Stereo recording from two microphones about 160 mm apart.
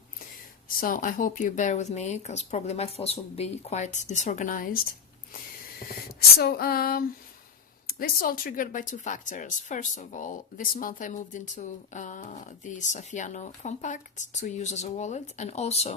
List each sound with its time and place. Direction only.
0.8 s speech: 60° left (ahead or behind)
6.4 s a sound: 70° left (ahead or behind)
7.9 s speech: 65° left (ahead or behind); by 16.0 s 40° left (ahead or behind)